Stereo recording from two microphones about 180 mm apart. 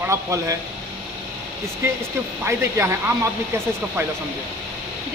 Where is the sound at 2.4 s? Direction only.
15° right (ahead or behind).